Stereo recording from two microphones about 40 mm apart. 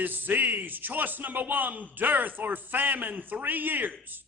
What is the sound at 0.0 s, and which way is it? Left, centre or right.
A man's voice, right.